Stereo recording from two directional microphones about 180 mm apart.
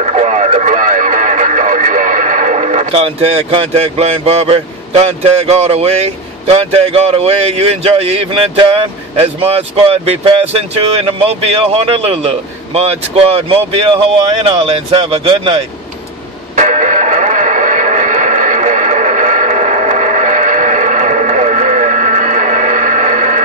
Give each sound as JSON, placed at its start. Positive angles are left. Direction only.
{"t": 0.0, "sound": "speech", "side_deg": -40}
{"t": 16.5, "sound": "music", "side_deg": -40}